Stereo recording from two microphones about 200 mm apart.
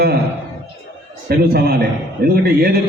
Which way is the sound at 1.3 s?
50° right (ahead or behind).